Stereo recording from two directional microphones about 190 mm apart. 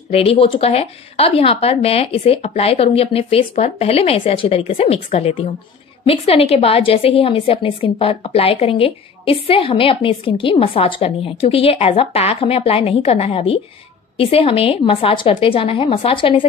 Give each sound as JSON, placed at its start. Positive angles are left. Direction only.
{"t": 0.1, "sound": "a woman's voice", "side_deg": 30}